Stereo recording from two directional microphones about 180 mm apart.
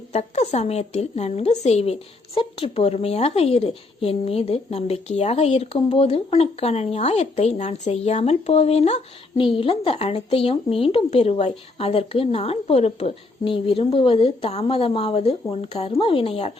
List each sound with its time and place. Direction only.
0.1 s a woman's voice: 35° left (ahead or behind)